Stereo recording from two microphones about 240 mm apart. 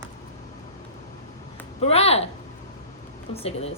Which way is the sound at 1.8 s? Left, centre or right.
Left.